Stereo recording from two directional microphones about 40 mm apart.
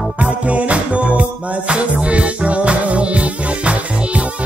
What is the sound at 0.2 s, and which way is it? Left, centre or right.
Music, right.